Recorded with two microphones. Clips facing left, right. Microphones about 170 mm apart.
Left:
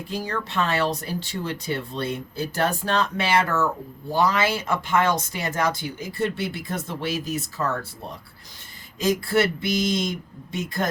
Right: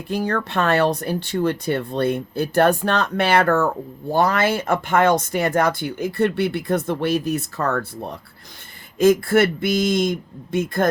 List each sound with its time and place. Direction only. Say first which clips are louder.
0.1 s speech: right 7 dB; 60° right (ahead or behind)